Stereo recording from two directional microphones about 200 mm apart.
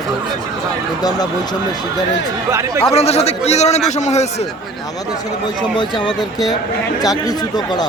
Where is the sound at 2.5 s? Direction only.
15° right (ahead or behind).